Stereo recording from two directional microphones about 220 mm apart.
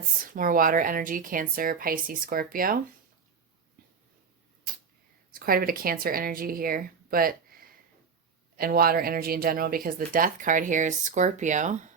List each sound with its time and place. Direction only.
0.3 s speech: 40° right (ahead or behind)
5.3 s speech: 40° right (ahead or behind)
8.5 s speech: 40° right (ahead or behind)